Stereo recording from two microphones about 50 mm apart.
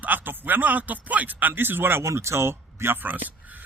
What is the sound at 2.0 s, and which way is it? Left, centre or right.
Speech, right.